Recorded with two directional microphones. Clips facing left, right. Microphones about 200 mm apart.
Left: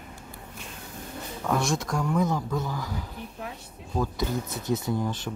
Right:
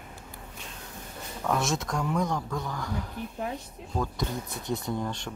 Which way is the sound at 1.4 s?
Centre (ahead or behind).